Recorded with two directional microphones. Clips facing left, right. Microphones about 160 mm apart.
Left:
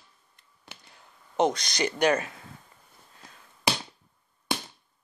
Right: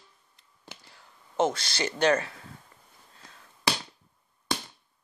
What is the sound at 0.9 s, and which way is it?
Speech, 20° left (ahead or behind).